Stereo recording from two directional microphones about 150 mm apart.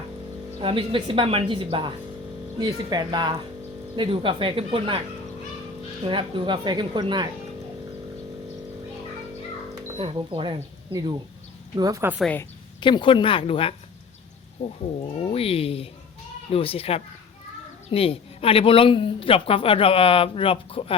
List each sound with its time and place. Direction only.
0.6 s a woman's voice: 35° right (ahead or behind)
6.1 s a woman's voice: 35° right (ahead or behind)
10.0 s a woman's voice: 35° right (ahead or behind)
11.8 s speech: 20° right (ahead or behind)
12.8 s a woman's voice: 30° left (ahead or behind)